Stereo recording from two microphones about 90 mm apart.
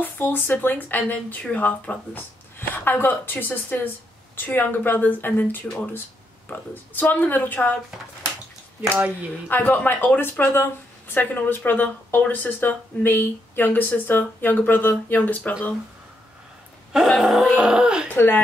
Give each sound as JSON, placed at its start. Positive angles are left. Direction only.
{"t": 0.0, "sound": "speech", "side_deg": 20}
{"t": 9.5, "sound": "speech", "side_deg": 20}
{"t": 16.9, "sound": "a sound", "side_deg": 0}
{"t": 17.6, "sound": "speech", "side_deg": -10}
{"t": 18.1, "sound": "speech", "side_deg": 25}